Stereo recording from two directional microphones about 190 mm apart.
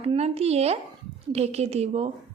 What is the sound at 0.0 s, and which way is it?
A woman's voice, 35° right (ahead or behind).